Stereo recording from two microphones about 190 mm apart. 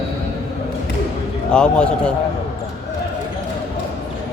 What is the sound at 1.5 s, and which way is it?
Speech, 5° left (ahead or behind).